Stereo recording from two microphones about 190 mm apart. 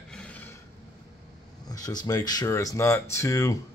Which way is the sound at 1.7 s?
20° left (ahead or behind).